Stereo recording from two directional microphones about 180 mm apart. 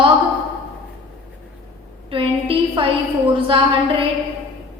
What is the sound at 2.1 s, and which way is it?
A woman's voice, 30° right (ahead or behind).